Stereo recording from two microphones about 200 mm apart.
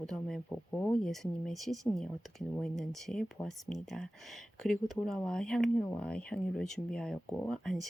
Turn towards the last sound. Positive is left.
turn(degrees=0)  # may be behind; listen again after turning